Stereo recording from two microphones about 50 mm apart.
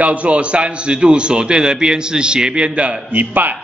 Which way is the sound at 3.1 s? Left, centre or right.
Right.